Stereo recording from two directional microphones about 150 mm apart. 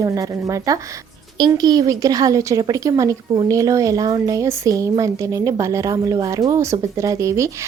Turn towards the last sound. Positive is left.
turn(degrees=-20)  # may be behind; listen again after turning